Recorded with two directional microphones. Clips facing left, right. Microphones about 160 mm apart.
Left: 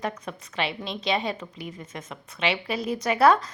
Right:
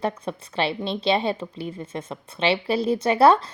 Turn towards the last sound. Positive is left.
turn(degrees=-30)  # may be behind; listen again after turning